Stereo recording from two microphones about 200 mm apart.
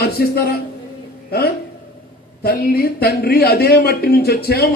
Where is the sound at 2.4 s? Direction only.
50° left (ahead or behind).